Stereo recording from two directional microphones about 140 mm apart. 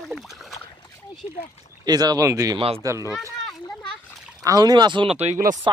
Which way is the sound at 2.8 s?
20° right (ahead or behind).